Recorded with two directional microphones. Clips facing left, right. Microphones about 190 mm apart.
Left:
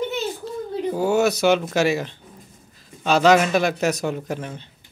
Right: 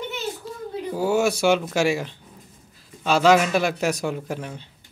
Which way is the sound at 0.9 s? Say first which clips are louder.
Left 1 dB; 10° right (ahead or behind).